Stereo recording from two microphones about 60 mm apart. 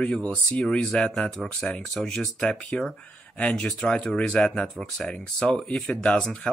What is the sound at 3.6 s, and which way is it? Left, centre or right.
Speech, centre.